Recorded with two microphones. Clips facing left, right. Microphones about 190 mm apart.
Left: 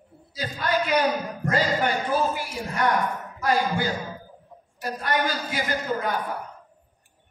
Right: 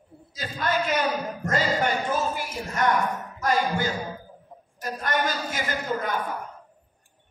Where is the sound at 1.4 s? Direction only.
45° right (ahead or behind).